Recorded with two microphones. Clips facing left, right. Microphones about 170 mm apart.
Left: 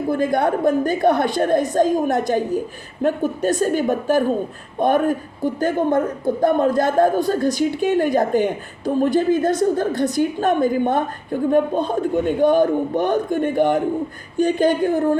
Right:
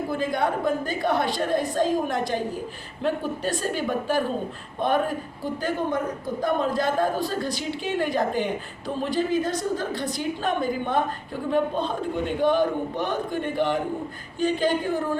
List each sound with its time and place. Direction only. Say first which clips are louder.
0.1 s a man's voice: left 8 dB; 50° left (ahead or behind)